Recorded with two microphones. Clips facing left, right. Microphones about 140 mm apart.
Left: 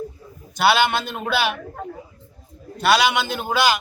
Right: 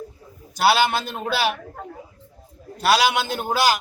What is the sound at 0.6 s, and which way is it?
Speech, 35° right (ahead or behind).